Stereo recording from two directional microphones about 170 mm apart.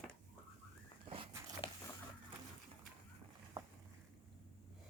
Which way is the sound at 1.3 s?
20° right (ahead or behind).